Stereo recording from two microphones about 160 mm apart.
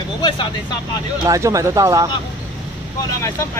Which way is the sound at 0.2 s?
30° left (ahead or behind).